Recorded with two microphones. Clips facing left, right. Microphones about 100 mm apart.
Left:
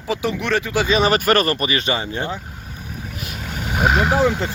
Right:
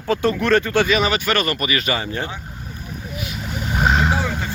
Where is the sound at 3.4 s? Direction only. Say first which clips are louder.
Left 1 dB; centre (ahead or behind).